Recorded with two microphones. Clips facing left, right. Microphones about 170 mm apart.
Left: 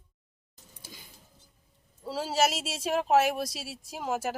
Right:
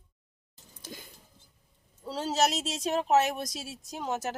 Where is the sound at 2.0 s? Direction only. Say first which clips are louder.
Even; 5° left (ahead or behind).